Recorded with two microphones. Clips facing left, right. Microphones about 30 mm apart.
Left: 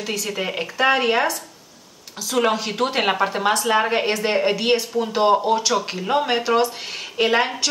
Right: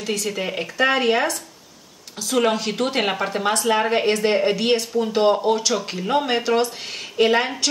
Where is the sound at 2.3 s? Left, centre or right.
Centre.